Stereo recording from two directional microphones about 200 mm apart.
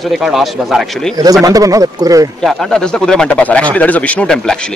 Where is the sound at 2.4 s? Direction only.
Centre (ahead or behind).